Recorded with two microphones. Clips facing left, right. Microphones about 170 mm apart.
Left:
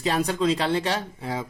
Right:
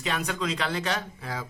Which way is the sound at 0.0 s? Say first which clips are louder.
Left 7 dB; 35° left (ahead or behind).